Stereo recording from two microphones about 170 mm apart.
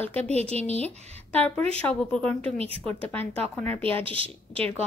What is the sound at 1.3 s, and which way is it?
A woman's voice, 10° left (ahead or behind).